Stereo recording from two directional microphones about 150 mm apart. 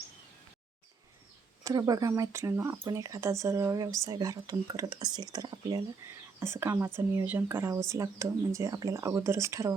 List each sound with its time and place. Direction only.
1.6 s speech: 25° right (ahead or behind)